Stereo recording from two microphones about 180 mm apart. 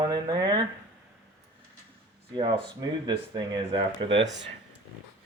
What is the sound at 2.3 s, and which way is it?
Speech, 25° right (ahead or behind).